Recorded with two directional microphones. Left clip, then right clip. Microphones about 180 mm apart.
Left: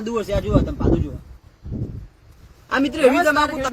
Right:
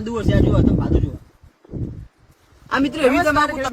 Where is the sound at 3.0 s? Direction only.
20° right (ahead or behind).